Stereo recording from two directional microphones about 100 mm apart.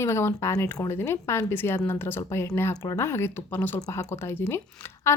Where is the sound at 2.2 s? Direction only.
35° left (ahead or behind).